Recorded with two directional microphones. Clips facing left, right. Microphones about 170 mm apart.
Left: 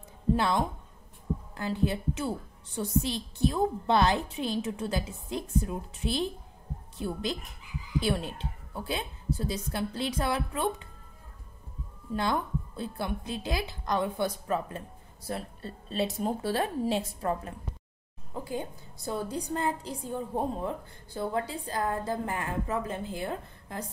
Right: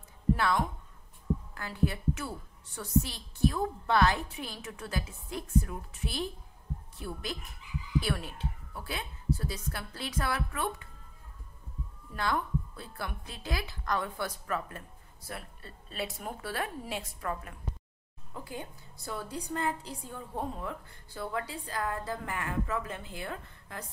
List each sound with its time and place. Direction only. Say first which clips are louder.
0.3 s a woman's voice: left 2 dB; 25° left (ahead or behind)
12.1 s a woman's voice: left 3 dB; 20° left (ahead or behind)